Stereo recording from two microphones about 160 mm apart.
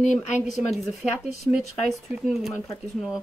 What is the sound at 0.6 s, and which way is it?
Speech, centre (ahead or behind).